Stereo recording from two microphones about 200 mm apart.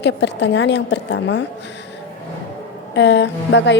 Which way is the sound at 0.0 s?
60° left (ahead or behind).